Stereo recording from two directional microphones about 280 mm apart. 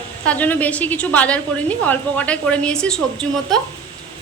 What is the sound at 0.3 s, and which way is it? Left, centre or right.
A woman's voice, centre.